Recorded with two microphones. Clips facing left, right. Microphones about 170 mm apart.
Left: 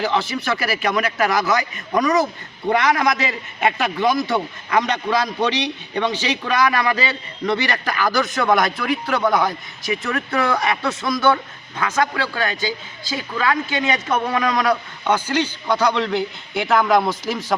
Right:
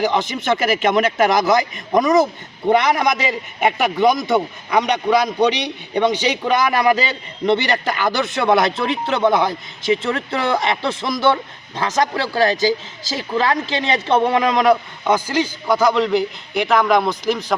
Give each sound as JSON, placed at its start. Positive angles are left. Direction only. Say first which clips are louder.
{"t": 0.0, "sound": "a man's voice", "louder": "right 2 dB", "side_deg": -20}
{"t": 11.8, "sound": "speech", "louder": "right 2 dB", "side_deg": -35}
{"t": 15.6, "sound": "a man's voice", "louder": "right 5 dB", "side_deg": -5}